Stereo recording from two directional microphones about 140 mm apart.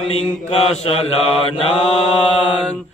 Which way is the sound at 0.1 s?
45° left (ahead or behind).